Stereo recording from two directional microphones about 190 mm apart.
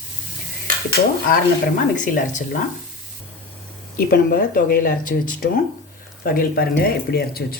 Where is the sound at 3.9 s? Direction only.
50° left (ahead or behind).